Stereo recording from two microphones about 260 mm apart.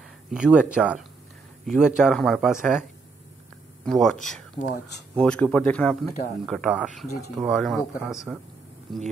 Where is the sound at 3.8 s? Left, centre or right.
Centre.